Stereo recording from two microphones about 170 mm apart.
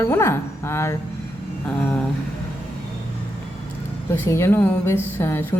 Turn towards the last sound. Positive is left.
turn(degrees=15)  # may be behind; listen again after turning